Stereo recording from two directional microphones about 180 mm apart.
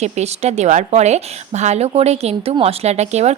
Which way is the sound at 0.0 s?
40° right (ahead or behind).